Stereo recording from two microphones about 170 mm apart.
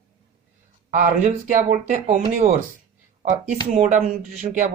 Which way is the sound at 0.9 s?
50° right (ahead or behind).